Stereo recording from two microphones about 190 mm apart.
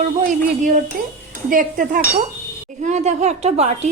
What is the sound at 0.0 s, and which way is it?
A woman's voice, 45° right (ahead or behind).